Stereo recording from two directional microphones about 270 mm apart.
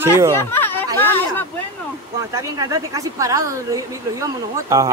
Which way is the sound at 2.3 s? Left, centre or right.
Centre.